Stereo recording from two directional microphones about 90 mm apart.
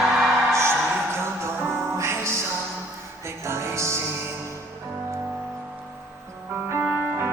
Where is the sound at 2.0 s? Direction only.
30° right (ahead or behind).